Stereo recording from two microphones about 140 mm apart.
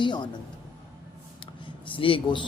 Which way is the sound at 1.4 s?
35° left (ahead or behind).